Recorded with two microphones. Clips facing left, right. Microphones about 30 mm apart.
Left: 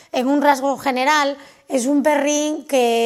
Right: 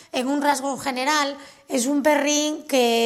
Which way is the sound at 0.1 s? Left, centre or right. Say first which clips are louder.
Left 6 dB; centre.